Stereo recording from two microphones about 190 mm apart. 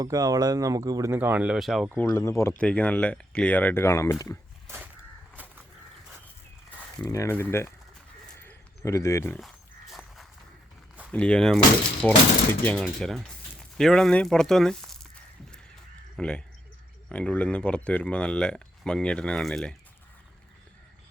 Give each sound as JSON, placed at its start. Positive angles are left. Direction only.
{"t": 0.0, "sound": "speech", "side_deg": -20}
{"t": 2.0, "sound": "speech", "side_deg": 15}
{"t": 5.4, "sound": "crow", "side_deg": -10}
{"t": 7.0, "sound": "speech", "side_deg": 15}
{"t": 8.4, "sound": "a sound", "side_deg": 15}
{"t": 9.9, "sound": "walk", "side_deg": 0}
{"t": 11.1, "sound": "speech", "side_deg": 5}